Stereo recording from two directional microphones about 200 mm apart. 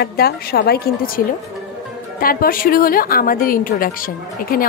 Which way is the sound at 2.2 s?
45° left (ahead or behind).